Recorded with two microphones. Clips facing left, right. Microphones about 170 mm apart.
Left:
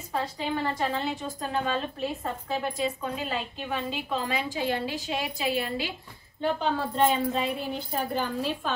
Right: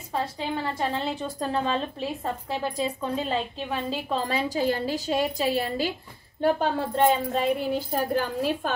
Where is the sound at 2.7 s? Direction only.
35° right (ahead or behind).